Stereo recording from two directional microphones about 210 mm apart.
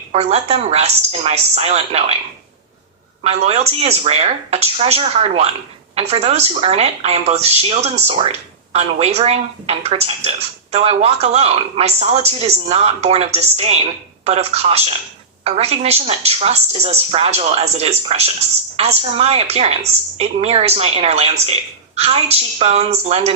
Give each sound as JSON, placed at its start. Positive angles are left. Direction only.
{"t": 0.1, "sound": "speech", "side_deg": -30}
{"t": 3.2, "sound": "speech", "side_deg": -30}